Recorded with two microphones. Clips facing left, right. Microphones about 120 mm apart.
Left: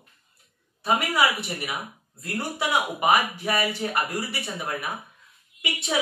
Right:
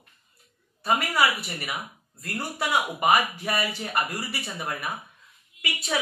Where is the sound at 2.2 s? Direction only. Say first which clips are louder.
Left 2 dB; centre (ahead or behind).